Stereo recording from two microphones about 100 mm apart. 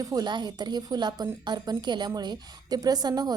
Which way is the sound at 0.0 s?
40° right (ahead or behind).